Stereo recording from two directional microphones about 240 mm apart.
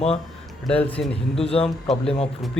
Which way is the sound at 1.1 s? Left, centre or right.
Left.